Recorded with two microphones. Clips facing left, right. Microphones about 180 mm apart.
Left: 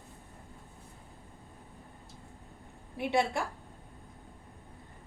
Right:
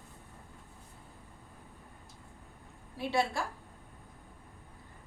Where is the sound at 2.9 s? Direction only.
20° left (ahead or behind).